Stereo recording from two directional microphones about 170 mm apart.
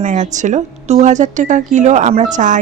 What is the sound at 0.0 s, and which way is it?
Speech, 45° right (ahead or behind).